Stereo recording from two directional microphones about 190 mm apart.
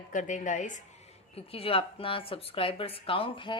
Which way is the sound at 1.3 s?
30° left (ahead or behind).